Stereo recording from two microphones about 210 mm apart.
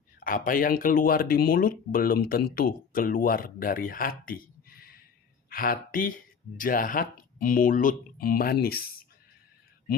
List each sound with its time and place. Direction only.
0.2 s speech: 40° left (ahead or behind)